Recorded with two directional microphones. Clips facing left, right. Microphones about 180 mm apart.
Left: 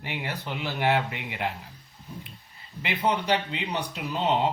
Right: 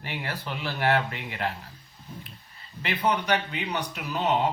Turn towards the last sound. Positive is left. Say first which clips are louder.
# even
turn(degrees=25)  # may be behind; listen again after turning